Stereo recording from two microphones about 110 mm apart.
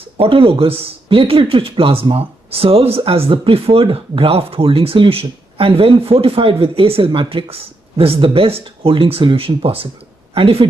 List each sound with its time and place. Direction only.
0.2 s speech: 60° right (ahead or behind)